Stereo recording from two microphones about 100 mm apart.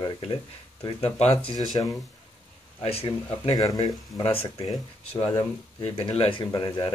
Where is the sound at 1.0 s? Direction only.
85° left.